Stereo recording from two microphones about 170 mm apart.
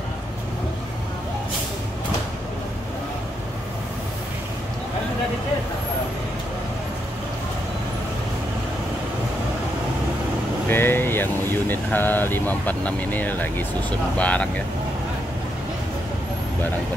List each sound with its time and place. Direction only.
10.7 s speech: 10° left (ahead or behind)